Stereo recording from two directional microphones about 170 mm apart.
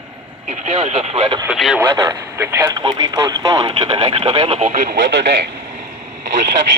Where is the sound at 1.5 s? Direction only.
5° right (ahead or behind).